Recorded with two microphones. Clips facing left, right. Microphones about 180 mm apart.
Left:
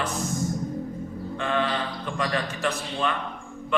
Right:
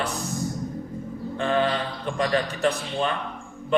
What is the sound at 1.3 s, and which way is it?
Mantra, 30° right (ahead or behind).